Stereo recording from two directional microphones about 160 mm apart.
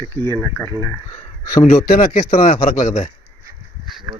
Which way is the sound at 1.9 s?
60° left (ahead or behind).